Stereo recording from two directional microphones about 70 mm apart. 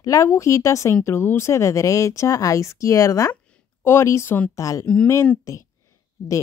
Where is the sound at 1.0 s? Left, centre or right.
Left.